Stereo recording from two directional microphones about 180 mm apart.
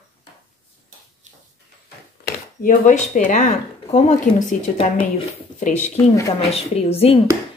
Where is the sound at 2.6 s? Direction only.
45° left (ahead or behind).